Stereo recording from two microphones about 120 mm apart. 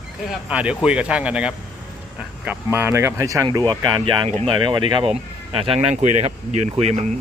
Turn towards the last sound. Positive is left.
turn(degrees=-70)  # may be behind; listen again after turning